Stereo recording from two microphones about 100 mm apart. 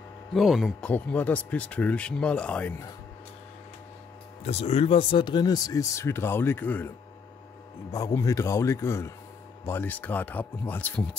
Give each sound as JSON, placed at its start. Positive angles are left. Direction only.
{"t": 0.3, "sound": "speech", "side_deg": 0}
{"t": 0.7, "sound": "speech", "side_deg": 15}
{"t": 4.5, "sound": "speech", "side_deg": 85}
{"t": 7.9, "sound": "speech", "side_deg": 30}